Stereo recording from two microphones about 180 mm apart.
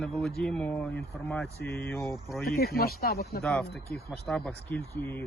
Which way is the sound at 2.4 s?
55° left (ahead or behind).